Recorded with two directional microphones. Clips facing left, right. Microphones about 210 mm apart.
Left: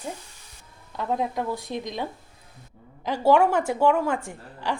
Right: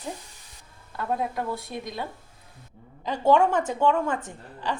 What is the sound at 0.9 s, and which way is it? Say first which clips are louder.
A woman's voice: left 2 dB; 20° left (ahead or behind).